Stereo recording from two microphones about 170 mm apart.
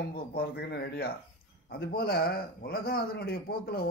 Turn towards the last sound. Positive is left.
turn(degrees=65)  # may be behind; listen again after turning